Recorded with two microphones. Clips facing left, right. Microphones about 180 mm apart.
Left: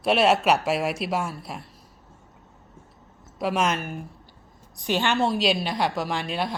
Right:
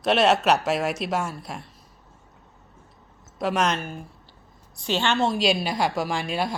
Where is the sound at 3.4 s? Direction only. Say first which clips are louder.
Even; 5° left (ahead or behind).